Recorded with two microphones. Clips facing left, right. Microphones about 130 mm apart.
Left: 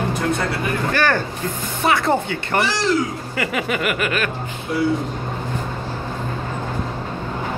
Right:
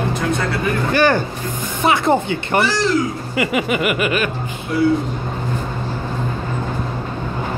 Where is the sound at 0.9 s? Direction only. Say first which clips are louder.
Right 5 dB; 15° right (ahead or behind).